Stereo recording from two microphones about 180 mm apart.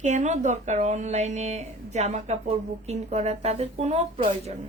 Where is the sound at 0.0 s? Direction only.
40° right (ahead or behind).